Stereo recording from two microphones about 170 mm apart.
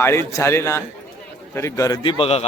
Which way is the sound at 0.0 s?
15° left (ahead or behind).